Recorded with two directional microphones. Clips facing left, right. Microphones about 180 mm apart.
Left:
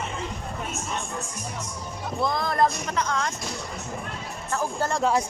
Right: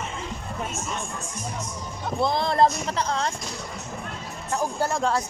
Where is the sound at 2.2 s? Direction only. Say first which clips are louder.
Right 3 dB; 30° right (ahead or behind).